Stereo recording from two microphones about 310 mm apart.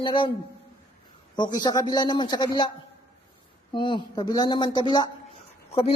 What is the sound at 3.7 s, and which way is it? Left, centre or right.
Speech, centre.